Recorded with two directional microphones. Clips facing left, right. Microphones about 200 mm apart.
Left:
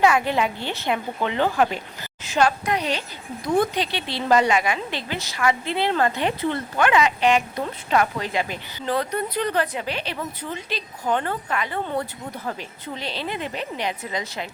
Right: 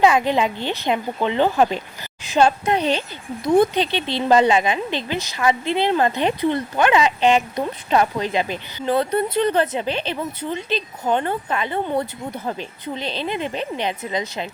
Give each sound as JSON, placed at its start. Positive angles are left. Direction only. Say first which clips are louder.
{"t": 0.0, "sound": "a woman's voice", "louder": "right 3 dB", "side_deg": -20}